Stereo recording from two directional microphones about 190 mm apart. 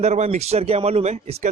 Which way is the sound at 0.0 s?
35° right (ahead or behind).